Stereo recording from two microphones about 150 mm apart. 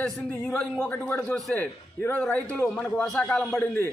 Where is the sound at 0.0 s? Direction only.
5° left (ahead or behind).